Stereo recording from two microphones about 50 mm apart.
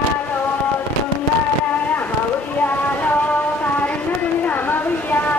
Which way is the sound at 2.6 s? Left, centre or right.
Left.